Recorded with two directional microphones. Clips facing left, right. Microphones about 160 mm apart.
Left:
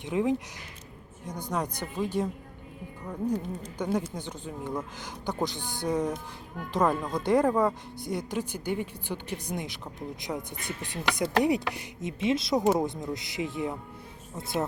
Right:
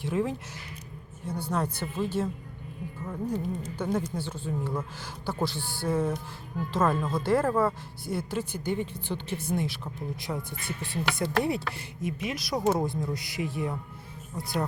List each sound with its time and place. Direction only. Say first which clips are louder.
0.0 s speech: left 2 dB; 15° left (ahead or behind)
1.5 s speech: even; 15° left (ahead or behind)